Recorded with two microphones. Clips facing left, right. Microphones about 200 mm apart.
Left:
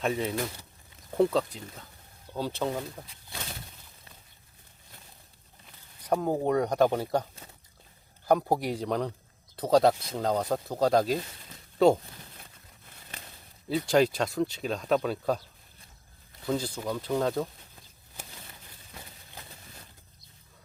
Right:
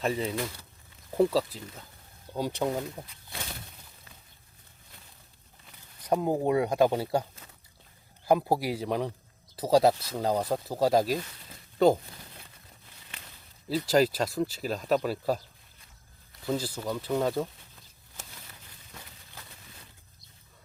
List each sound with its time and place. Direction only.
0.0 s speech: centre (ahead or behind)
2.3 s speech: 15° right (ahead or behind)
6.1 s speech: 10° right (ahead or behind)
8.3 s speech: 5° right (ahead or behind)
13.7 s speech: centre (ahead or behind)
16.5 s speech: 5° right (ahead or behind)